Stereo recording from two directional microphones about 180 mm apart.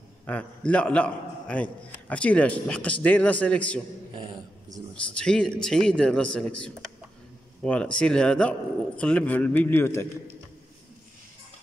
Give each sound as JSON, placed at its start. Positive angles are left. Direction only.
{"t": 0.3, "sound": "a man's voice", "side_deg": 5}
{"t": 4.1, "sound": "dog", "side_deg": -25}
{"t": 5.1, "sound": "a man's voice", "side_deg": 5}
{"t": 7.6, "sound": "a man's voice", "side_deg": 5}